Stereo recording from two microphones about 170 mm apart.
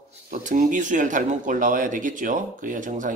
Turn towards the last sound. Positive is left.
turn(degrees=-50)  # may be behind; listen again after turning